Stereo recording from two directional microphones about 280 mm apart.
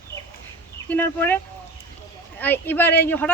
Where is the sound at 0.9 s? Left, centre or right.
Centre.